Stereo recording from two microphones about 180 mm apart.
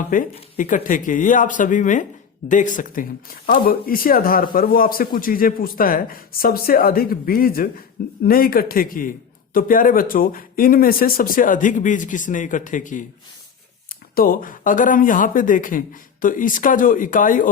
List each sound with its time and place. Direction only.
0.1 s speech: 45° left (ahead or behind)
14.2 s speech: 50° left (ahead or behind)